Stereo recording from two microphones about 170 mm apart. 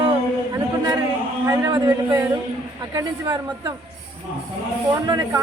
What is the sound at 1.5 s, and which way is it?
A man's voice, 20° right (ahead or behind).